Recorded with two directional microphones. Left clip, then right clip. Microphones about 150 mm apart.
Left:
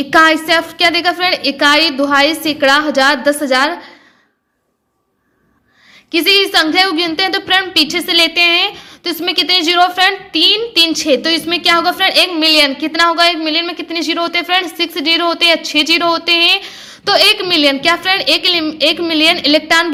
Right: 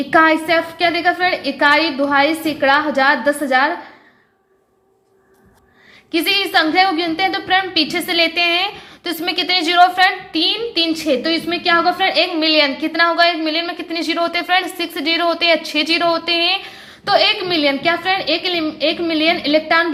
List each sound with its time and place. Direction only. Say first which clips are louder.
0.1 s a woman's voice: left 3 dB; 40° left (ahead or behind)
6.1 s a woman's voice: left 6 dB; 30° left (ahead or behind)